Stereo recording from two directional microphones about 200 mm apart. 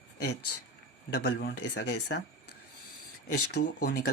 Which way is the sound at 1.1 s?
60° left (ahead or behind).